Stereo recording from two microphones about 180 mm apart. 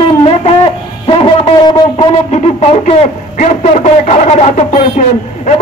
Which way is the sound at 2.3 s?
35° left (ahead or behind).